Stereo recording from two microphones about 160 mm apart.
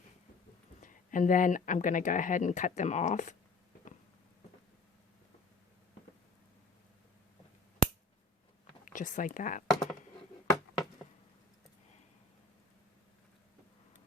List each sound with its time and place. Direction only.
0.8 s speech: 55° left (ahead or behind)
8.8 s speech: 55° left (ahead or behind)
9.6 s a sound: centre (ahead or behind)